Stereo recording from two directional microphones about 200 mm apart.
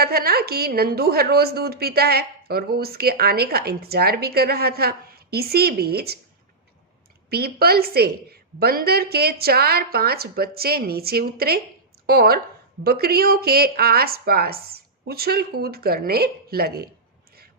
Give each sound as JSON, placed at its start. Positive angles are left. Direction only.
{"t": 0.0, "sound": "a woman's voice", "side_deg": -50}
{"t": 7.3, "sound": "a woman's voice", "side_deg": -50}